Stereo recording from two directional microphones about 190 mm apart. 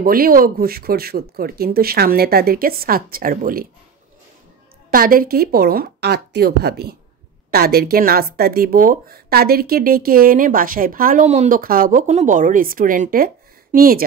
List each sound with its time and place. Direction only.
0.0 s speech: 50° right (ahead or behind)
4.9 s speech: 50° right (ahead or behind)